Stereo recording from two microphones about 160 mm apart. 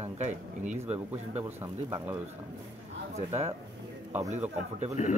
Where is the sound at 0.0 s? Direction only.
45° right (ahead or behind).